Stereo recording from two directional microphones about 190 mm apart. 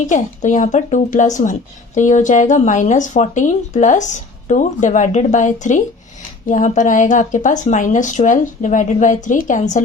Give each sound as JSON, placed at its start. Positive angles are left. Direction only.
{"t": 0.1, "sound": "speech", "side_deg": 40}